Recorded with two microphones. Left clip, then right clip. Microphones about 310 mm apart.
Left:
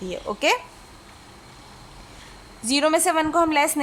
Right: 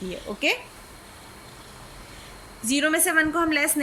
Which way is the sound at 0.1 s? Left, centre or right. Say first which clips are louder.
Left 4 dB; centre.